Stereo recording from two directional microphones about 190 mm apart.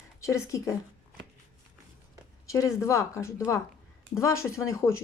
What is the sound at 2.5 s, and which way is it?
Speech, 15° left (ahead or behind).